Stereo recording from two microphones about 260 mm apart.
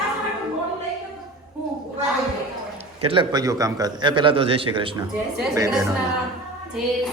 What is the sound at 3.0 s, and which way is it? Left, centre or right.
A man's voice, centre.